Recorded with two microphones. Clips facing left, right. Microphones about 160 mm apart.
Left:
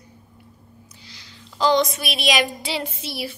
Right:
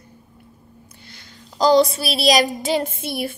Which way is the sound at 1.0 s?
50° right (ahead or behind).